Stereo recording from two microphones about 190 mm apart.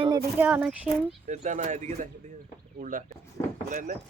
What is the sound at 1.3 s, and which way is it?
Speech, 40° right (ahead or behind).